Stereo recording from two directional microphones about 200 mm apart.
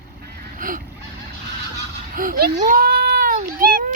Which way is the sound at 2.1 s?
45° right (ahead or behind).